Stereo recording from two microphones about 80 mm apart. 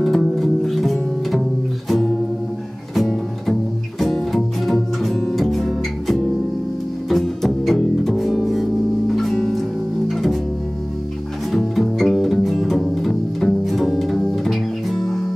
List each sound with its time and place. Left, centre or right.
0.0 s music: centre
2.9 s music: centre
11.5 s music: centre